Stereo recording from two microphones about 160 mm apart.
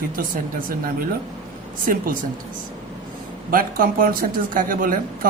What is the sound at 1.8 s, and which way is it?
Speech, 55° right (ahead or behind).